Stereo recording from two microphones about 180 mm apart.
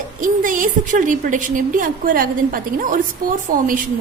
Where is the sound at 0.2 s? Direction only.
50° right (ahead or behind).